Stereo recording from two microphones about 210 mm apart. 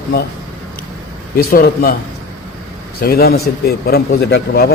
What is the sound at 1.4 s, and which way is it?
Speech, 45° left (ahead or behind).